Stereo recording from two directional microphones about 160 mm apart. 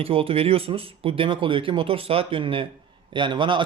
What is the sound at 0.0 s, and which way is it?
A man's voice, 35° right (ahead or behind).